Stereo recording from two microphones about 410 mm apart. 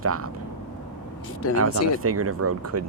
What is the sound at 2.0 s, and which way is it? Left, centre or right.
Speech, right.